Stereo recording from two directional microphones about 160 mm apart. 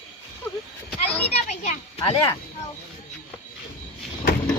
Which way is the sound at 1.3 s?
45° left (ahead or behind).